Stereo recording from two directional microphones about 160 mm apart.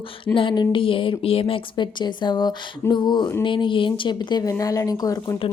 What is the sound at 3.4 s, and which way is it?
Speech, 30° left (ahead or behind).